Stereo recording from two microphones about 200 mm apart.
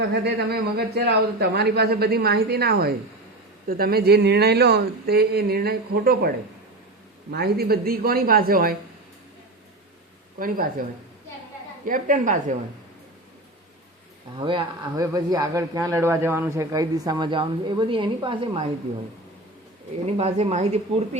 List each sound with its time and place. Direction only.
0.1 s a man's voice: 55° right (ahead or behind)
10.3 s a man's voice: 45° right (ahead or behind)
11.9 s speech: 40° right (ahead or behind)
14.3 s speech: 25° right (ahead or behind)
20.1 s speech: 30° right (ahead or behind)